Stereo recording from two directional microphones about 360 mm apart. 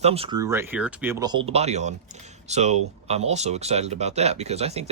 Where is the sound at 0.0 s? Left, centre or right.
Centre.